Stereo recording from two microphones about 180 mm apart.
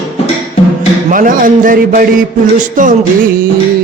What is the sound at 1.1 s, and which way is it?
Speech, 50° right (ahead or behind).